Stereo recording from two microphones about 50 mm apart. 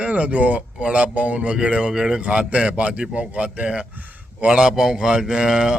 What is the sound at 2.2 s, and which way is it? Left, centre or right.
A man's voice, right.